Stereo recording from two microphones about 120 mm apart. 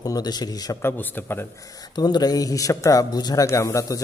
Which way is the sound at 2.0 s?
35° left (ahead or behind).